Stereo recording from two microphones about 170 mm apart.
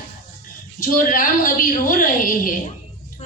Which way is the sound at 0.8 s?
55° left (ahead or behind).